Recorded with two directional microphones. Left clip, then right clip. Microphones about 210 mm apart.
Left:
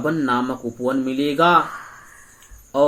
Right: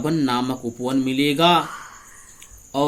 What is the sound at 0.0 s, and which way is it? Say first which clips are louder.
Speech: left 1 dB; 60° right (ahead or behind).